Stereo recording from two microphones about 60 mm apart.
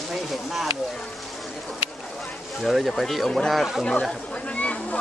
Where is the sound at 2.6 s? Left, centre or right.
Centre.